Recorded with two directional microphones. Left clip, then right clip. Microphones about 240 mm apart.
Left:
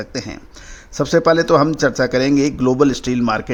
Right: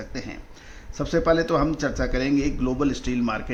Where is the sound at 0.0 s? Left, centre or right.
Left.